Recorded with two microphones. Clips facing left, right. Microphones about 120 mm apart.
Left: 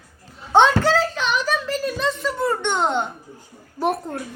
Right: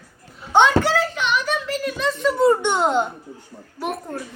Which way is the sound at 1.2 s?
30° left (ahead or behind).